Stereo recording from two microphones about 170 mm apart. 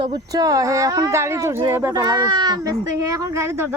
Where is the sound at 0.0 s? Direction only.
25° right (ahead or behind).